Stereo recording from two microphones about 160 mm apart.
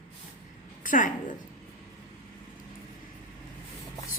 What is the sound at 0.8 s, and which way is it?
Speech, 55° left (ahead or behind).